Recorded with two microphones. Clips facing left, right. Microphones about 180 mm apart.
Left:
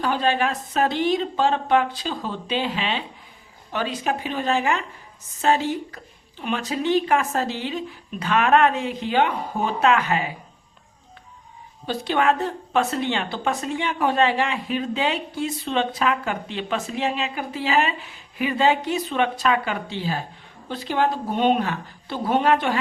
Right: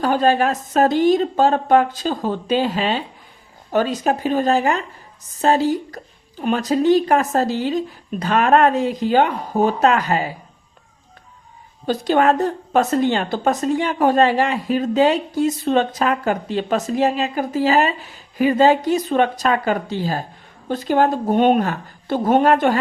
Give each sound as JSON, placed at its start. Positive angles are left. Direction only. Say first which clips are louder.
{"t": 0.0, "sound": "a woman's voice", "louder": "right 5 dB", "side_deg": -45}
{"t": 11.9, "sound": "a woman's voice", "louder": "right 5 dB", "side_deg": -40}